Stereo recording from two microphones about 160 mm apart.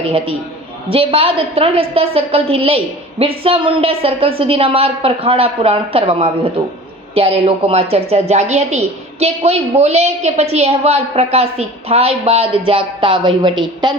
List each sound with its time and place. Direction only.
0.9 s a woman's voice: 35° right (ahead or behind)